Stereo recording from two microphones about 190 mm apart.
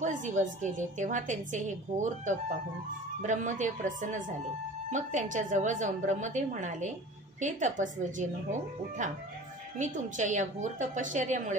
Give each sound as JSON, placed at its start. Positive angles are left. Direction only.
{"t": 0.0, "sound": "a woman's voice", "side_deg": -40}